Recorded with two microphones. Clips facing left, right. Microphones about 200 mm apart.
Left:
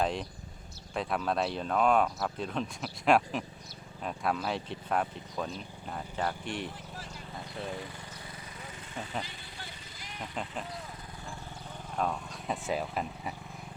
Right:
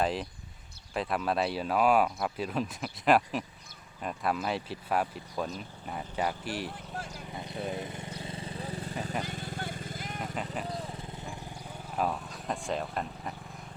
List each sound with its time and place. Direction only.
0.0 s speech: 5° right (ahead or behind)
6.9 s speech: 55° right (ahead or behind)
7.3 s vehicle: 20° right (ahead or behind); by 10.2 s 50° right (ahead or behind)
10.4 s speech: 35° right (ahead or behind)
11.9 s speech: 5° right (ahead or behind)